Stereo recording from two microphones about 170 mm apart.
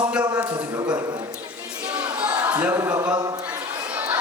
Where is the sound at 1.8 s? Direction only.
25° right (ahead or behind).